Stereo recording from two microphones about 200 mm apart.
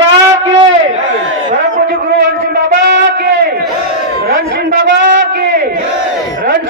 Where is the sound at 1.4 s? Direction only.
50° right (ahead or behind).